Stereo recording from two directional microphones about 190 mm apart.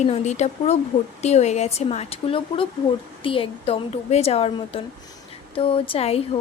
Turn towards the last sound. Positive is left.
turn(degrees=30)  # may be behind; listen again after turning